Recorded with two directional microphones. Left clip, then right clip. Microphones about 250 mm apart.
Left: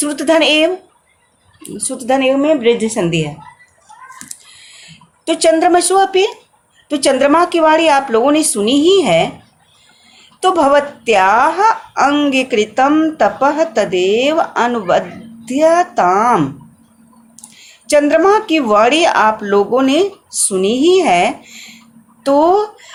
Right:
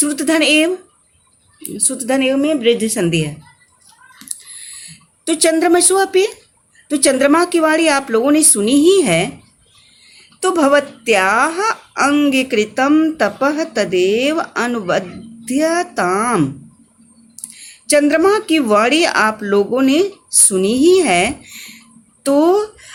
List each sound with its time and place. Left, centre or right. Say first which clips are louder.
0.0 s speech: left 3 dB; right
4.3 s a sound: right 2 dB; right
6.8 s speech: left 1 dB; right
10.4 s speech: left 2 dB; right